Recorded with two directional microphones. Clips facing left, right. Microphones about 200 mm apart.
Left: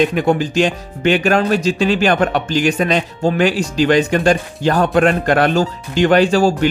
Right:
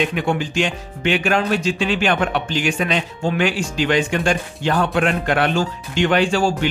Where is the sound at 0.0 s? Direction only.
40° left (ahead or behind).